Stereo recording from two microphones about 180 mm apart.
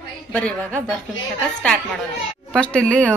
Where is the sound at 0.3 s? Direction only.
5° left (ahead or behind).